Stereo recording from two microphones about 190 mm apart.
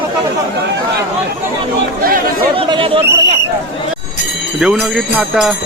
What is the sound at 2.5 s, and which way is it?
Speech, 30° right (ahead or behind).